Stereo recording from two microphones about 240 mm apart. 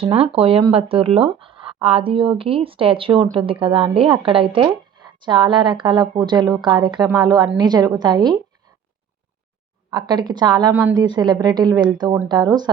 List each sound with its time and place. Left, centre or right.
0.0 s speech: right
9.9 s speech: centre